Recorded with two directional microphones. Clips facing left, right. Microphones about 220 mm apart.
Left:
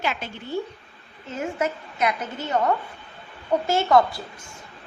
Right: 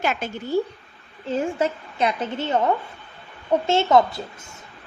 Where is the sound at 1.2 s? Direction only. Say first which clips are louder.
Right 4 dB; 30° right (ahead or behind).